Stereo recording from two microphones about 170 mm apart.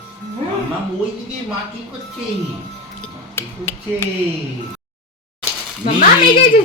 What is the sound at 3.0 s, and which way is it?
Speech, 15° left (ahead or behind).